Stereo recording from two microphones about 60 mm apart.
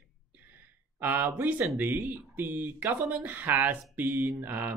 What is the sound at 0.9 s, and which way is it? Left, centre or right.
Speech, right.